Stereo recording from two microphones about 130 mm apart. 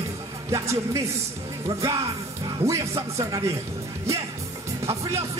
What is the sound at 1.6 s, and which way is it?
Music, 25° right (ahead or behind).